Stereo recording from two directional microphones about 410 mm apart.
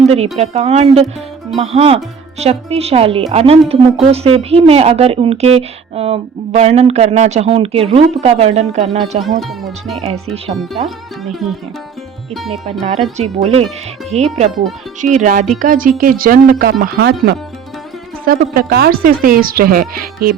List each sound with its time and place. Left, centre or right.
0.1 s speech: centre
9.4 s speech: centre
10.3 s speech: centre
13.1 s speech: centre